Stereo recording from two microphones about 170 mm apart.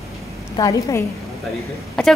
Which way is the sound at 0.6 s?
20° left (ahead or behind).